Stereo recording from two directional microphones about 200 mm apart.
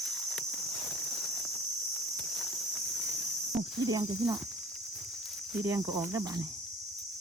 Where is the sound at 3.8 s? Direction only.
20° right (ahead or behind).